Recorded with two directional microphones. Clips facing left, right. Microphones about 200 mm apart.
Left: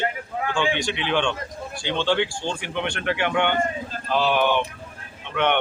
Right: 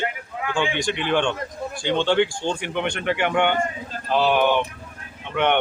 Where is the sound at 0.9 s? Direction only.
50° right (ahead or behind).